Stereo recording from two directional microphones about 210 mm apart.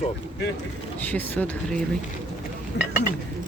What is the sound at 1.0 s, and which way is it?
Speech, 10° left (ahead or behind).